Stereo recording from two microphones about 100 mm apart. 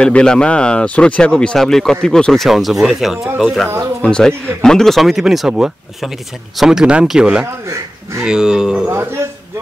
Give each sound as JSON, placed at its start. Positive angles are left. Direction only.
{"t": 0.0, "sound": "speech", "side_deg": 10}
{"t": 8.8, "sound": "speech", "side_deg": -25}